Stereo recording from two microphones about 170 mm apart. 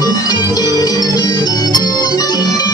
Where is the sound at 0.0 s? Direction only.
20° left (ahead or behind).